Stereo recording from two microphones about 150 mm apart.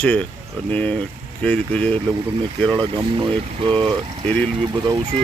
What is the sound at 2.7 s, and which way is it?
Speech, 30° right (ahead or behind).